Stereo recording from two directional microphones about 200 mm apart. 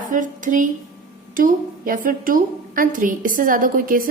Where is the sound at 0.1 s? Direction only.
40° right (ahead or behind).